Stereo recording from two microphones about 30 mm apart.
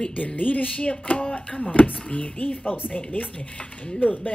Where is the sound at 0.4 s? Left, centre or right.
Left.